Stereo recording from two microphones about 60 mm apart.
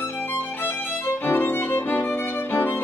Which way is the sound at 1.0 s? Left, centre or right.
Left.